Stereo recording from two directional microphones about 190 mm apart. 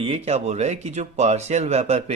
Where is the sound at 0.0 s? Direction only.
35° right (ahead or behind).